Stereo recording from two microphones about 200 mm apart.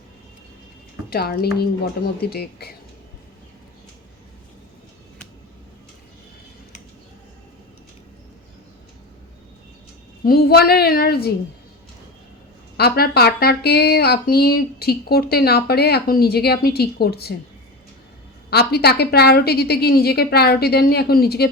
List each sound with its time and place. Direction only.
1.1 s speech: 50° left (ahead or behind)
10.2 s speech: 50° left (ahead or behind)
12.7 s speech: 50° left (ahead or behind)
18.5 s speech: 55° left (ahead or behind)